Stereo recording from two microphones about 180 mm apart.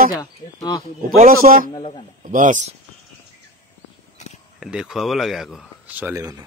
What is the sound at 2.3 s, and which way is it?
Speech, 45° right (ahead or behind).